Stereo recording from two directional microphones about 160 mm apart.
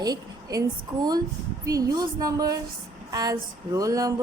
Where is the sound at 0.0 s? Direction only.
25° right (ahead or behind).